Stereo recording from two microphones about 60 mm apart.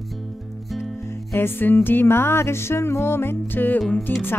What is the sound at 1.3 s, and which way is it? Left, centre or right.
Music, left.